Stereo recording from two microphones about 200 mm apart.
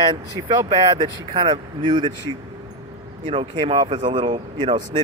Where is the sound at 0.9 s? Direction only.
25° right (ahead or behind).